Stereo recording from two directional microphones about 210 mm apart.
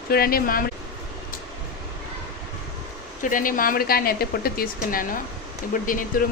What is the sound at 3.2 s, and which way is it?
A woman's voice, 40° left (ahead or behind).